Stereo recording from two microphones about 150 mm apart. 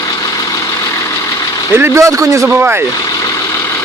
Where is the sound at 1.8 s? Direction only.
20° right (ahead or behind).